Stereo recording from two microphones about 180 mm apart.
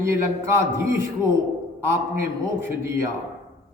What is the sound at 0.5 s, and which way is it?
A man's voice, 15° right (ahead or behind).